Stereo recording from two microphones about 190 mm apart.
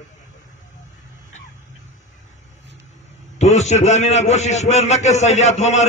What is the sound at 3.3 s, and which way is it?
A man's voice, 35° left (ahead or behind).